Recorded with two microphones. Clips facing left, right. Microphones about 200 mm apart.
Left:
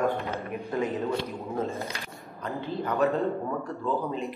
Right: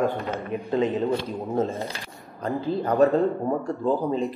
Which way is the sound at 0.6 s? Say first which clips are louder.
Right 6 dB; 20° right (ahead or behind).